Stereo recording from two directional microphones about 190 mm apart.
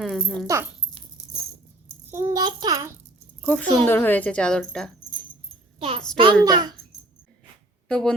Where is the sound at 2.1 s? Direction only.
15° right (ahead or behind).